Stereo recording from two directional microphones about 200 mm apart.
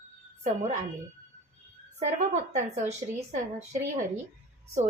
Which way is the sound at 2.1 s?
35° right (ahead or behind).